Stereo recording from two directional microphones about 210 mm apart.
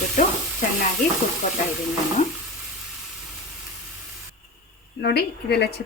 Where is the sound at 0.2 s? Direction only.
35° left (ahead or behind).